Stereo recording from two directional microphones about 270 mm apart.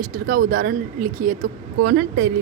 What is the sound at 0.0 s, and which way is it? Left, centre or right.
Speech, right.